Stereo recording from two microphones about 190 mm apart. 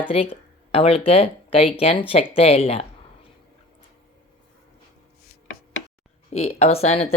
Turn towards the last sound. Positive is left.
turn(degrees=35)  # may be behind; listen again after turning